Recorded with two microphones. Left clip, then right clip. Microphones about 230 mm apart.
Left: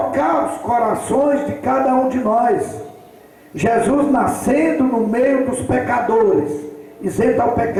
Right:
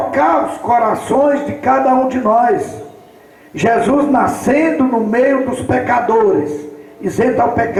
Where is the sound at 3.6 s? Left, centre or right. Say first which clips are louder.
Right 3 dB; centre.